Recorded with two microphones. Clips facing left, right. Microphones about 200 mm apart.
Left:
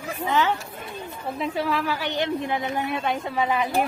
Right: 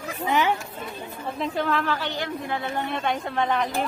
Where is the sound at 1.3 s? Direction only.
5° left (ahead or behind).